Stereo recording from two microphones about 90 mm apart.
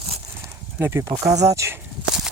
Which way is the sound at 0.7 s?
20° right (ahead or behind).